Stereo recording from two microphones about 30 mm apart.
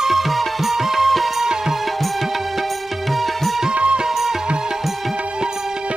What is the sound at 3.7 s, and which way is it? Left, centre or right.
Music, right.